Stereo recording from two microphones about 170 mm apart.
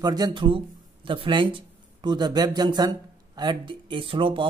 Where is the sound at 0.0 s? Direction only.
25° right (ahead or behind).